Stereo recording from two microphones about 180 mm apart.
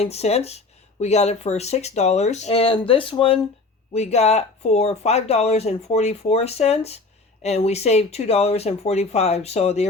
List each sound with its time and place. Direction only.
0.0 s speech: 35° left (ahead or behind)